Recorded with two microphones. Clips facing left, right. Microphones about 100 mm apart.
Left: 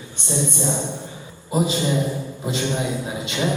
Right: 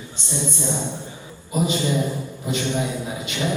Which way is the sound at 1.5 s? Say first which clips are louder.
Left 1 dB; 25° left (ahead or behind).